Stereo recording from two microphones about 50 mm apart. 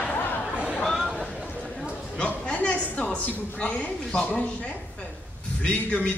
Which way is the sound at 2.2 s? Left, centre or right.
Left.